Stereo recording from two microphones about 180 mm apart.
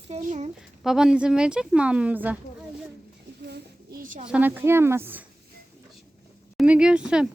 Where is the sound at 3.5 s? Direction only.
65° right (ahead or behind).